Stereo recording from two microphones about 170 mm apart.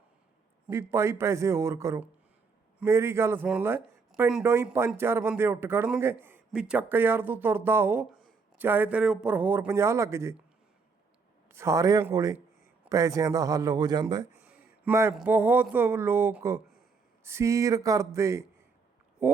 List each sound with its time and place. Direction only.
0.7 s speech: 15° right (ahead or behind)
4.4 s speech: 15° right (ahead or behind)
11.4 s a man's voice: 15° right (ahead or behind)
14.4 s a sound: 15° right (ahead or behind)
15.1 s speech: 10° right (ahead or behind)